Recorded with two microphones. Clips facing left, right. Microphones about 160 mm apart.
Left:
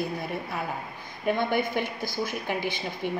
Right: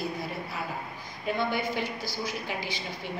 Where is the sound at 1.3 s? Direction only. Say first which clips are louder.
Left 3 dB; 55° left (ahead or behind).